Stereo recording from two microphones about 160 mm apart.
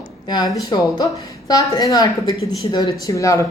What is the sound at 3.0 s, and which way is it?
Speech, 20° left (ahead or behind).